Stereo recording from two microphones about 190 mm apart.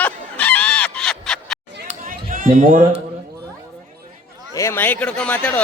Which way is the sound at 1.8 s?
45° right (ahead or behind).